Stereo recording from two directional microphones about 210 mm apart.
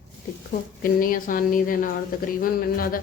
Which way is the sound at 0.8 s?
40° left (ahead or behind).